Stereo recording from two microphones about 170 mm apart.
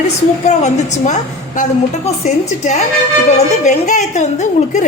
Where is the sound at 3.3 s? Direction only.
45° left (ahead or behind).